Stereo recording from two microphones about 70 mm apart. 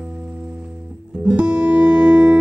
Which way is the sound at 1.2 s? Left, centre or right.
Centre.